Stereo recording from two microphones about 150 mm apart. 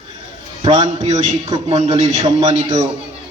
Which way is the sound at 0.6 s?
30° right (ahead or behind).